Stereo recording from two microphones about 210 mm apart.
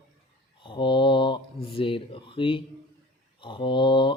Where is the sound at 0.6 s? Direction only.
20° left (ahead or behind).